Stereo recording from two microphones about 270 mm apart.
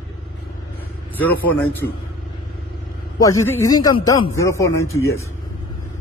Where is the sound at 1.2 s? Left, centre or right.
Left.